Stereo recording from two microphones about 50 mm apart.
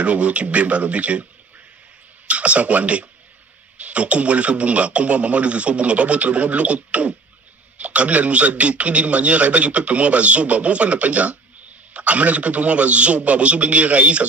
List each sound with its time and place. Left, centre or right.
0.0 s a man's voice: right
2.2 s a man's voice: right